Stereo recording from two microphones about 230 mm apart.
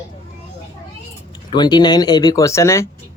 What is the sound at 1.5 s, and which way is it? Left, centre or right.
Speech, centre.